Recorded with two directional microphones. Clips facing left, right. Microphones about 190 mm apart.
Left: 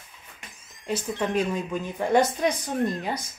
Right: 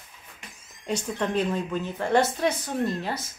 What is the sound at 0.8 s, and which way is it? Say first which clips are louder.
Speech: even; 5° left (ahead or behind).